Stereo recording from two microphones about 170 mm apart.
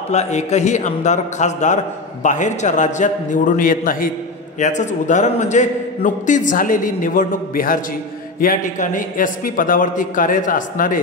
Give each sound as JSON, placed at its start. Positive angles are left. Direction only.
{"t": 0.1, "sound": "a man's voice", "side_deg": 40}